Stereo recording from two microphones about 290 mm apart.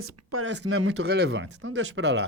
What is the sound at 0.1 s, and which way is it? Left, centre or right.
Speech, right.